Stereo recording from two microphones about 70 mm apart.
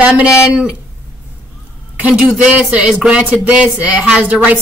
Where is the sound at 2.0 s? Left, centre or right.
Centre.